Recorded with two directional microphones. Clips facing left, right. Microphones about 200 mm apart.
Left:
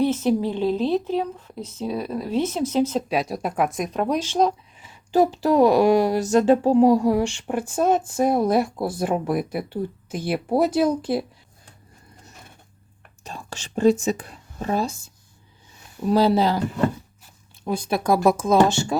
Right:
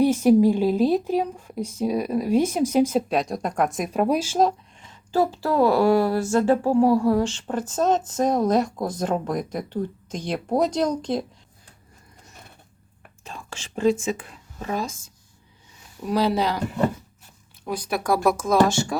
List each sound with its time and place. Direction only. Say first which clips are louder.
0.0 s speech: right 4 dB; 10° right (ahead or behind)
3.1 s speech: even; 5° left (ahead or behind)
4.9 s speech: left 3 dB; 20° left (ahead or behind)
13.2 s whispering: left 2 dB; 40° left (ahead or behind)
14.0 s speech: left 3 dB; 40° left (ahead or behind)
16.0 s speech: left 4 dB; 30° left (ahead or behind)
17.7 s speech: left 3 dB; 25° left (ahead or behind)